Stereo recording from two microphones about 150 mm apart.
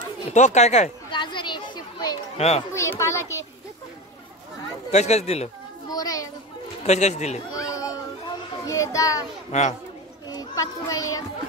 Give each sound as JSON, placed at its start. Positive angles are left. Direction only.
{"t": 0.3, "sound": "speech", "side_deg": 50}
{"t": 1.1, "sound": "a sound", "side_deg": 30}
{"t": 2.3, "sound": "a child's voice", "side_deg": 45}
{"t": 2.7, "sound": "a child's voice", "side_deg": 20}
{"t": 4.9, "sound": "speech", "side_deg": 45}
{"t": 5.9, "sound": "children playing", "side_deg": 25}
{"t": 6.9, "sound": "speech", "side_deg": 50}
{"t": 7.5, "sound": "children playing", "side_deg": 20}
{"t": 8.6, "sound": "a child's voice", "side_deg": 20}
{"t": 9.5, "sound": "speech", "side_deg": 50}
{"t": 10.4, "sound": "a child's voice", "side_deg": 25}